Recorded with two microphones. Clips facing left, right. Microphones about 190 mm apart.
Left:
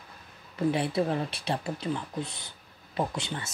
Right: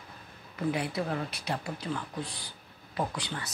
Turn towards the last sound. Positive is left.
turn(degrees=25)  # may be behind; listen again after turning